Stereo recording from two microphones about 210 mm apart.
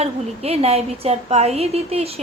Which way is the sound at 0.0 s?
30° right (ahead or behind).